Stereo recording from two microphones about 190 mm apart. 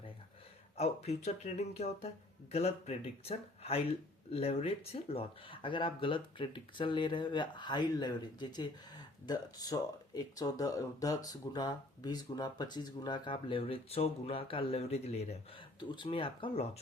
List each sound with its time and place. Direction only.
0.8 s speech: 35° left (ahead or behind)